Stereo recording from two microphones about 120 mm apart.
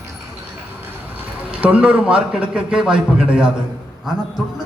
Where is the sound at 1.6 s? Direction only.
10° right (ahead or behind).